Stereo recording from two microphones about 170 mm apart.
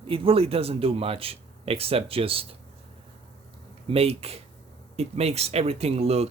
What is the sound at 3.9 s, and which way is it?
Speech, 35° right (ahead or behind).